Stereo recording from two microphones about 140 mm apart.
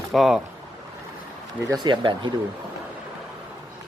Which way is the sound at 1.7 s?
35° right (ahead or behind).